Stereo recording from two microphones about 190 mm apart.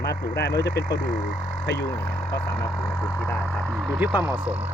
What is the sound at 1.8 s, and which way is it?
Speech, 20° left (ahead or behind).